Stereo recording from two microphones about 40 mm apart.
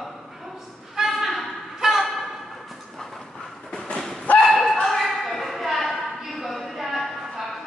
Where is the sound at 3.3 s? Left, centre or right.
Left.